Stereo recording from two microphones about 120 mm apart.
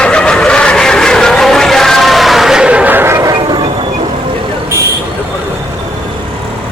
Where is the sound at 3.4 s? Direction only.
40° right (ahead or behind).